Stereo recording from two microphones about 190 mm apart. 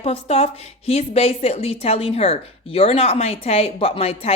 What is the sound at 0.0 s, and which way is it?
A woman's voice, 30° left (ahead or behind).